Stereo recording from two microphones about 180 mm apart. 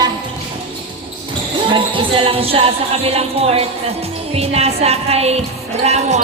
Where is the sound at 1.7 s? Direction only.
30° right (ahead or behind).